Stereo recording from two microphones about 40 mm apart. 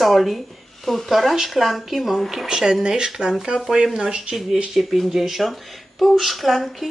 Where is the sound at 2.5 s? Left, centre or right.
Centre.